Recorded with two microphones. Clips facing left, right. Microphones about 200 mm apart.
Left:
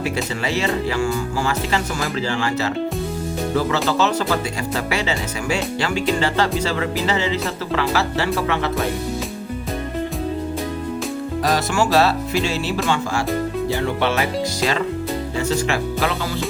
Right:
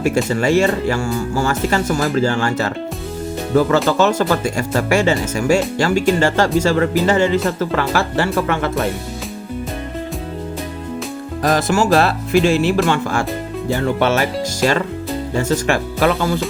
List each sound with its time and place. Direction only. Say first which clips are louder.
0.0 s speech: right 7 dB; 45° right (ahead or behind)
11.4 s music: right 5 dB; 45° right (ahead or behind)
12.9 s speech: right 2 dB; 55° right (ahead or behind)